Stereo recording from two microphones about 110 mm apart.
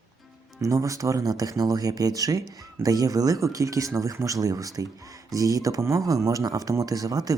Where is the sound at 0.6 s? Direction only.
30° right (ahead or behind).